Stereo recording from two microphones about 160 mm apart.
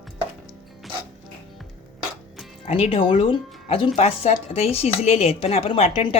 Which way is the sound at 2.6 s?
40° left (ahead or behind).